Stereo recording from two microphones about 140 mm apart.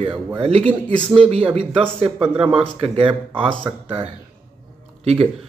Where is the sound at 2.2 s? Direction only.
10° right (ahead or behind).